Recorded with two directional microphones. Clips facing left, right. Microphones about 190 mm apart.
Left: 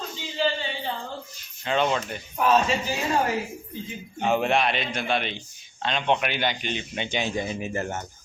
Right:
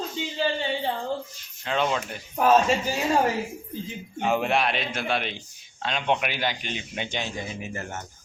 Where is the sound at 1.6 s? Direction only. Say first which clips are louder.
Left 2 dB; centre (ahead or behind).